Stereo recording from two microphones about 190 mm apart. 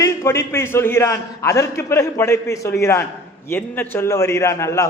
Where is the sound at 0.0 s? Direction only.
15° left (ahead or behind).